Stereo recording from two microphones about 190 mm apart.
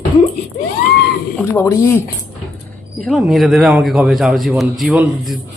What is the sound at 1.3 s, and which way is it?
Speech, 10° left (ahead or behind).